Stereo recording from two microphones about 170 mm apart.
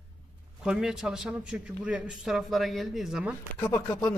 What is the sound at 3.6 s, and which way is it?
Speech, 15° left (ahead or behind).